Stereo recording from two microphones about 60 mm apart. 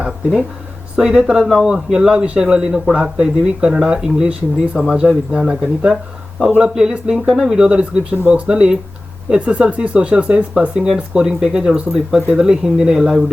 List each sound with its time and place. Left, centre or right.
0.9 s speech: centre
6.9 s speech: centre